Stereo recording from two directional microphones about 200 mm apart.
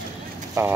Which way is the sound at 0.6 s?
10° right (ahead or behind).